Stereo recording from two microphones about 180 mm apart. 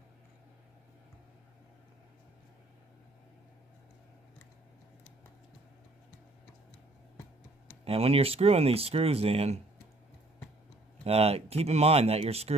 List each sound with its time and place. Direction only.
7.8 s speech: 35° right (ahead or behind)
11.1 s speech: 35° right (ahead or behind)